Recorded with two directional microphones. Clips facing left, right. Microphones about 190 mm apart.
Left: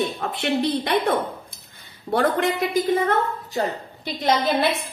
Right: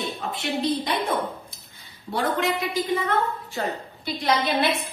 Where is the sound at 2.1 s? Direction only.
55° left (ahead or behind).